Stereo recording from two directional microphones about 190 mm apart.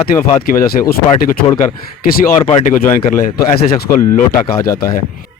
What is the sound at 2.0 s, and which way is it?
Speech, 50° left (ahead or behind).